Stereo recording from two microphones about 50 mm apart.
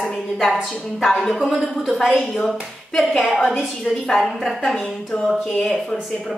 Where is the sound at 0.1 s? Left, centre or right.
Centre.